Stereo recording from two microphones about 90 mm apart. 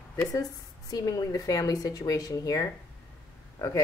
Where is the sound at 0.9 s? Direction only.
45° left (ahead or behind).